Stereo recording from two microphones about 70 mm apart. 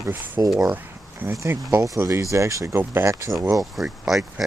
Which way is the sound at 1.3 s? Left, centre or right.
Right.